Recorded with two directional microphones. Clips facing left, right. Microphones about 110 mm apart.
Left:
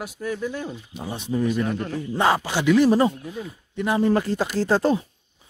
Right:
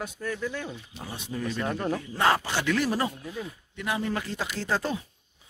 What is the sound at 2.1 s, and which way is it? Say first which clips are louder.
Speech: left 5 dB; 20° left (ahead or behind).